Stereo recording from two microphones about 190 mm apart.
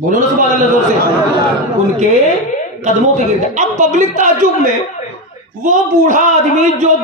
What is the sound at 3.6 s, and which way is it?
Speech, 40° right (ahead or behind).